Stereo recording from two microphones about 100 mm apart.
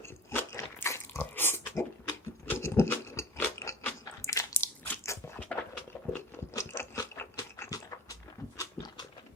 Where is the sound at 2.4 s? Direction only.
25° left (ahead or behind).